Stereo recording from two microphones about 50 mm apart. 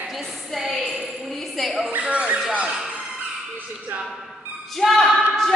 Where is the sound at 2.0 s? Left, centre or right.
Right.